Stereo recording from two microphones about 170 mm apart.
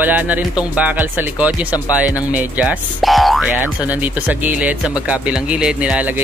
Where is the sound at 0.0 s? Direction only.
10° right (ahead or behind).